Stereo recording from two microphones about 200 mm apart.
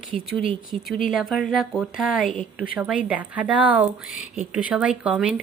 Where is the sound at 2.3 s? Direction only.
45° left (ahead or behind).